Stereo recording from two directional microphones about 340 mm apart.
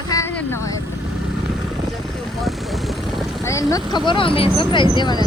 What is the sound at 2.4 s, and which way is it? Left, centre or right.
Vehicle, centre.